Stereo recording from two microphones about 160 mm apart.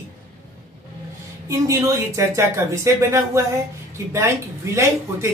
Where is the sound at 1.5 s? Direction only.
20° right (ahead or behind).